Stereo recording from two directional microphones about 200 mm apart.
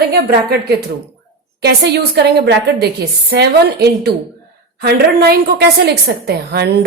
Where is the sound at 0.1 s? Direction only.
50° right (ahead or behind).